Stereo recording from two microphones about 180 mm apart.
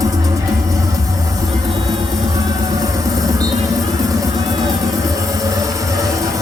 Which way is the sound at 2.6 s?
20° right (ahead or behind).